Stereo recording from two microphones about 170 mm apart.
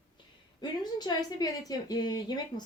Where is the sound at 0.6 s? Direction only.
25° left (ahead or behind).